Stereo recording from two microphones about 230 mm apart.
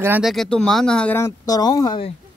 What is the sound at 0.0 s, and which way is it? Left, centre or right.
Speech, centre.